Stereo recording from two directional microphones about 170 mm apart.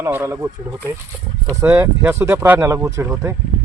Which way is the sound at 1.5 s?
15° right (ahead or behind).